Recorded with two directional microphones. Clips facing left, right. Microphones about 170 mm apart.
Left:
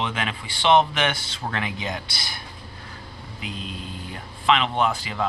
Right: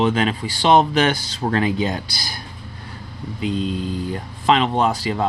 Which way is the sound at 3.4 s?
35° right (ahead or behind).